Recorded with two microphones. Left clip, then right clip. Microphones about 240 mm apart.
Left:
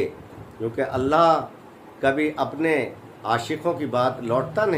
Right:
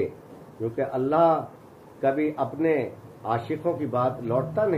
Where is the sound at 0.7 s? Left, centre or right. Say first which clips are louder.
Left 3 dB; centre.